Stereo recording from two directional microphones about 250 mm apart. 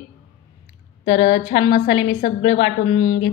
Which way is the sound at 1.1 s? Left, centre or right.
Left.